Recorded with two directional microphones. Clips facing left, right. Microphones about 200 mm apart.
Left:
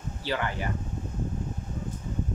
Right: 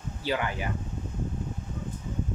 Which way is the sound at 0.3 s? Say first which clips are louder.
Right 1 dB; 15° right (ahead or behind).